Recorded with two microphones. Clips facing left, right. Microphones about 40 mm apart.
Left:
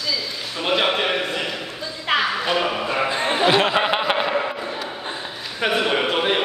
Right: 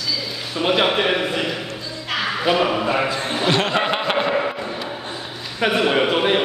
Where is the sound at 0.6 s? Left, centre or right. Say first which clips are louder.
Right 2 dB; centre.